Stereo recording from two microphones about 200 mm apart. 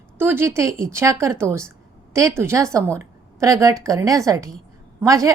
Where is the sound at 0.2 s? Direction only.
10° right (ahead or behind).